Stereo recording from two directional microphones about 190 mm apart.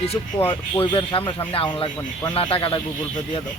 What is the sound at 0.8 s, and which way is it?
Speech, 25° left (ahead or behind).